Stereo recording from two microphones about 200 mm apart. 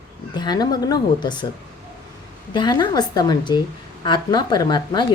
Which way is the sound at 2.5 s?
20° left (ahead or behind).